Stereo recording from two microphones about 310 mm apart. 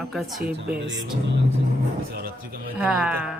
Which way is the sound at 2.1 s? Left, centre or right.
Right.